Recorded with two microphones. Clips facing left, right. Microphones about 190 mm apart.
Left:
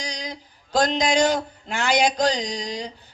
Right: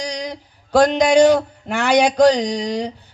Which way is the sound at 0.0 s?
65° right (ahead or behind).